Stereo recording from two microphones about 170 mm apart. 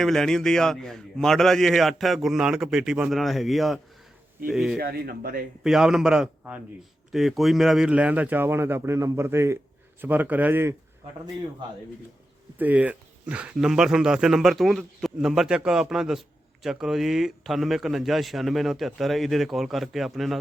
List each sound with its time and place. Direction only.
0.0 s a man's voice: 5° left (ahead or behind)
4.8 s speech: 65° right (ahead or behind)
5.6 s a man's voice: 5° right (ahead or behind)
12.5 s a man's voice: 10° right (ahead or behind)